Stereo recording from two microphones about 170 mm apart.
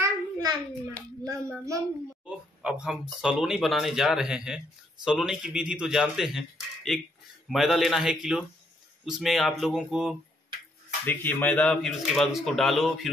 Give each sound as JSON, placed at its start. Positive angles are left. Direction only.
{"t": 0.0, "sound": "a sound", "side_deg": -25}
{"t": 1.2, "sound": "a child's voice", "side_deg": -20}
{"t": 2.2, "sound": "speech", "side_deg": -5}
{"t": 11.1, "sound": "speech", "side_deg": 10}